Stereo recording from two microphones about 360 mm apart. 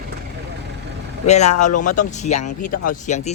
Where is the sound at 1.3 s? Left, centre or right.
Centre.